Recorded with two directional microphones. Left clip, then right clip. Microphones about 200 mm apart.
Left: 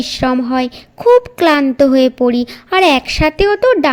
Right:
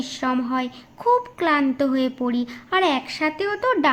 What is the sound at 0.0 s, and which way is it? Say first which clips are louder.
A woman's voice: left 9 dB; 35° left (ahead or behind).